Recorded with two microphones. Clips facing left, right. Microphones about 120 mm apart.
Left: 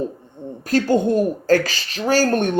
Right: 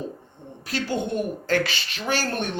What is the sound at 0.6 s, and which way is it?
A man's voice, 45° left (ahead or behind).